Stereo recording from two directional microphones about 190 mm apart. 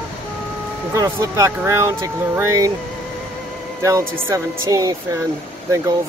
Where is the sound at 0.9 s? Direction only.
15° right (ahead or behind).